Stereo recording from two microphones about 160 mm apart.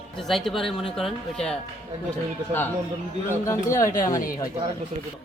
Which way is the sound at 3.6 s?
20° left (ahead or behind).